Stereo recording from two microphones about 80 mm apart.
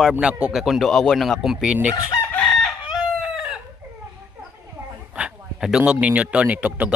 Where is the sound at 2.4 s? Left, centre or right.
Centre.